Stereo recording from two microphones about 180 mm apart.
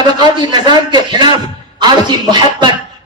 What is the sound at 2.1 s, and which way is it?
Speech, 25° right (ahead or behind).